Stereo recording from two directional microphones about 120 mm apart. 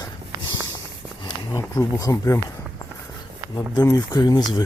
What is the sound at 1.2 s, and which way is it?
Speech, 30° left (ahead or behind).